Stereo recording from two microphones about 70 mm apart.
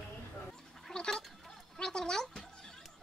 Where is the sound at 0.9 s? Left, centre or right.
Centre.